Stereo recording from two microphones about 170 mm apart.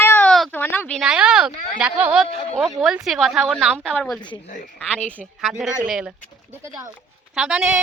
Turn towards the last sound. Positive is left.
turn(degrees=-5)  # may be behind; listen again after turning